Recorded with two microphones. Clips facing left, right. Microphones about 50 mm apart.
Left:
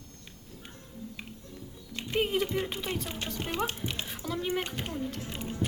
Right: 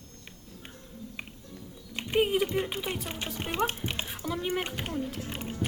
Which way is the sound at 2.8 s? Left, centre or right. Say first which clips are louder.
Even; centre.